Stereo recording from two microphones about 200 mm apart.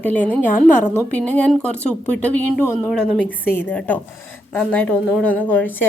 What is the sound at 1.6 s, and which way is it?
A woman's voice, 5° left (ahead or behind).